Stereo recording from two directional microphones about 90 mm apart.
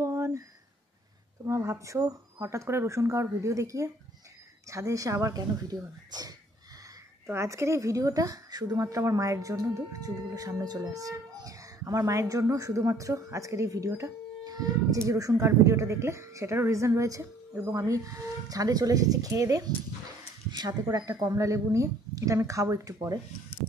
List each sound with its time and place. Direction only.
0.0 s a sound: 35° right (ahead or behind)
1.4 s a woman's voice: 35° right (ahead or behind)
7.2 s a woman's voice: 30° right (ahead or behind)